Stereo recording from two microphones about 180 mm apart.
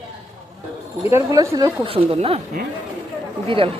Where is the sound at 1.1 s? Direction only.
15° right (ahead or behind); by 2.4 s 35° right (ahead or behind).